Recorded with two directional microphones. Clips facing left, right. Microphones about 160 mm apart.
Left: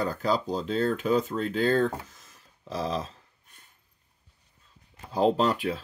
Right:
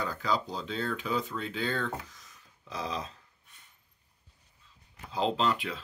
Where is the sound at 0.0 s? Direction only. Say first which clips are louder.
Left 5 dB; 40° left (ahead or behind).